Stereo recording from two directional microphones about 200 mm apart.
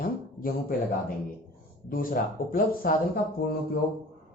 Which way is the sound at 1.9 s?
45° left (ahead or behind).